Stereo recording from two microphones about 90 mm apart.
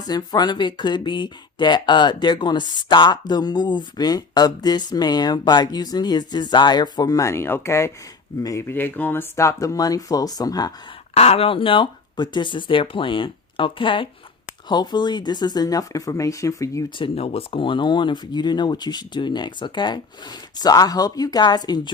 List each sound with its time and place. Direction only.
0.1 s speech: 50° left (ahead or behind)
8.6 s speech: 25° left (ahead or behind); by 10.7 s 45° left (ahead or behind)
11.3 s speech: 80° left
14.7 s speech: 55° left (ahead or behind); by 16.8 s 35° left (ahead or behind)
17.0 s speech: 90° left; by 20.0 s 60° left (ahead or behind)
20.6 s speech: 45° left (ahead or behind)